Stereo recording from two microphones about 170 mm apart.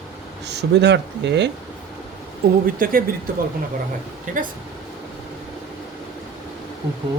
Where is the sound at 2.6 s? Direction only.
55° right (ahead or behind).